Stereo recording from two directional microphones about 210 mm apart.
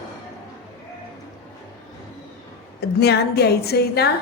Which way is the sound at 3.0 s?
50° left (ahead or behind).